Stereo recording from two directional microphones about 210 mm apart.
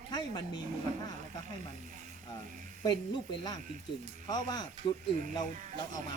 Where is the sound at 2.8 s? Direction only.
20° left (ahead or behind).